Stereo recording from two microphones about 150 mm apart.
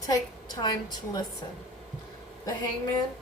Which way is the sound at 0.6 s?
25° left (ahead or behind).